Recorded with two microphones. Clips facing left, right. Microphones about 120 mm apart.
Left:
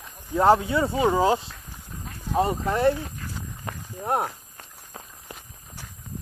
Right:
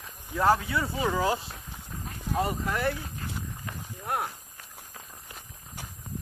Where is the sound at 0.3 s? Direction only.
25° left (ahead or behind).